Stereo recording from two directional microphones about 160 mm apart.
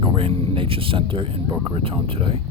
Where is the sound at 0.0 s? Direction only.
35° right (ahead or behind).